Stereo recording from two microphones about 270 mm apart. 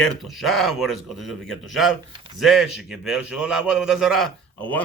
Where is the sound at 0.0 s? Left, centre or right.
Centre.